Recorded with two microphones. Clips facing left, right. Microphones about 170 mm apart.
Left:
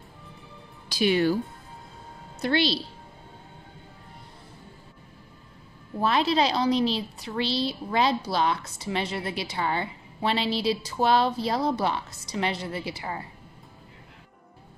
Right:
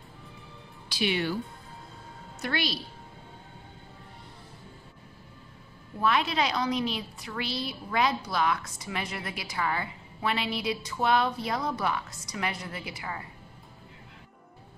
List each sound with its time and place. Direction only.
0.8 s speech: 40° left (ahead or behind)
2.4 s a woman's voice: 30° left (ahead or behind)
5.9 s a woman's voice: 30° left (ahead or behind)